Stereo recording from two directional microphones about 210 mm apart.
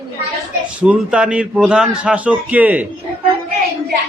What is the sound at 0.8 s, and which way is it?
A man's voice, 5° right (ahead or behind).